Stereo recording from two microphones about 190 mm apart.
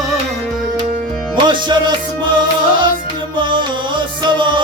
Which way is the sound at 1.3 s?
25° right (ahead or behind).